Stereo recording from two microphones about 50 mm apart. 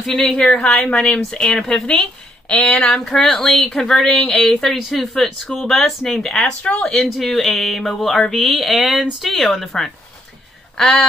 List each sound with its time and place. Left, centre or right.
0.0 s speech: centre
0.5 s speech: centre
1.5 s speech: centre
2.6 s speech: left
2.9 s speech: centre
3.8 s speech: centre
7.1 s speech: centre